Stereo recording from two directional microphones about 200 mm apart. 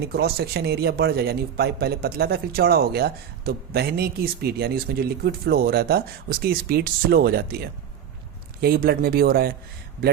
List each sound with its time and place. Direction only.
0.0 s a man's voice: 55° right (ahead or behind)